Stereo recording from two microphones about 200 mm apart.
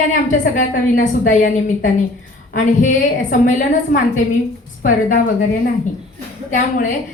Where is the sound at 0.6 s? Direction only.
40° left (ahead or behind).